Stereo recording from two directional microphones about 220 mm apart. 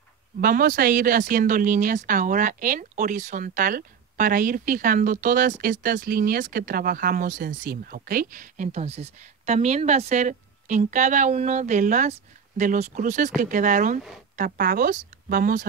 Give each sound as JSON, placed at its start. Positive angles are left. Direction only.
{"t": 0.4, "sound": "speech", "side_deg": -40}